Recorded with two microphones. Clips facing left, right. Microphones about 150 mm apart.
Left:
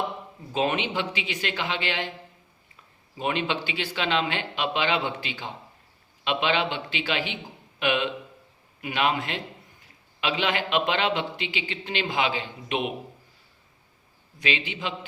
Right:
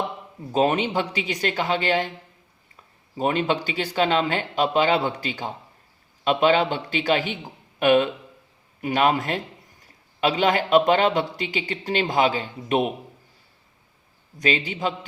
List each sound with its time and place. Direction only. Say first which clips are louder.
0.5 s a man's voice: right 5 dB; 40° right (ahead or behind)
3.2 s a man's voice: right 5 dB; 40° right (ahead or behind)
14.3 s a man's voice: right 5 dB; 40° right (ahead or behind)